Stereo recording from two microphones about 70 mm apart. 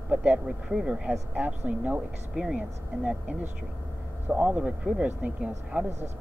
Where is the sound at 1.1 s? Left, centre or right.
Right.